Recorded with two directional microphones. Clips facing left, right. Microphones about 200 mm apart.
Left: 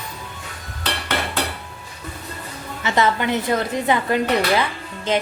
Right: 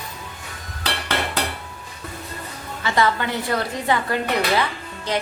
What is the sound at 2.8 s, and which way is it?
A woman's voice, 20° left (ahead or behind).